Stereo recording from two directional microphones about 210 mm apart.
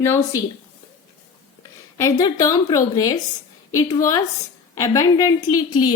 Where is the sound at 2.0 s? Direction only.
15° left (ahead or behind).